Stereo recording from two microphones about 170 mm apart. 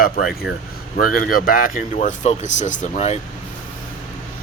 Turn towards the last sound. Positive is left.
turn(degrees=40)  # may be behind; listen again after turning